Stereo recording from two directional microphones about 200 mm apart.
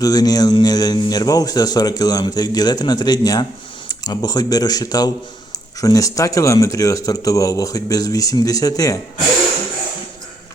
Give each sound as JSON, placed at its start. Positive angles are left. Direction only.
{"t": 0.0, "sound": "speech", "side_deg": 20}